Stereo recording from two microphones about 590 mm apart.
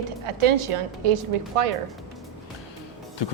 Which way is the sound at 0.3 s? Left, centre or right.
Right.